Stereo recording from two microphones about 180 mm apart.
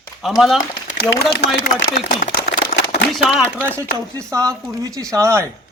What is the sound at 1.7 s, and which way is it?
Speech, 50° left (ahead or behind).